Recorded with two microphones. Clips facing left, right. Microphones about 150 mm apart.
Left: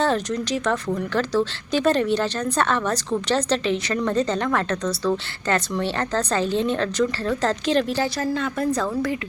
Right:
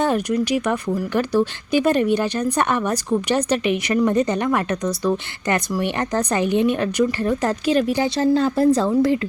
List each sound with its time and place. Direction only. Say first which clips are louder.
0.0 s a woman's voice: right 3 dB; 10° right (ahead or behind); by 9.1 s 30° right (ahead or behind)